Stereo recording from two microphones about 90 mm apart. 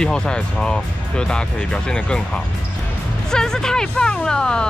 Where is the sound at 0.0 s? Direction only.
10° left (ahead or behind).